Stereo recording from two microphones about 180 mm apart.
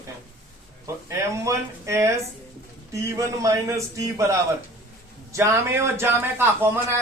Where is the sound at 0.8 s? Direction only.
15° right (ahead or behind).